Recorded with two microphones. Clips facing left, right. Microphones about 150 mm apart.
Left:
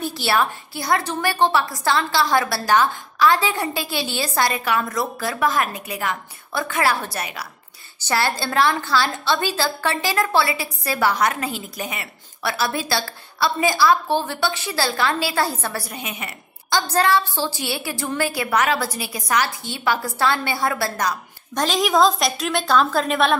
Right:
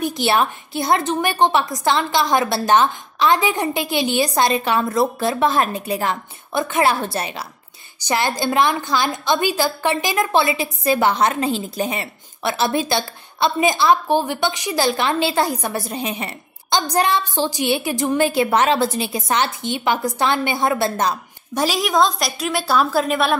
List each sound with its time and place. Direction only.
0.0 s a woman's voice: 20° right (ahead or behind)
6.5 s a woman's voice: 20° right (ahead or behind)
16.8 s a woman's voice: 15° right (ahead or behind)
21.5 s a woman's voice: 5° right (ahead or behind)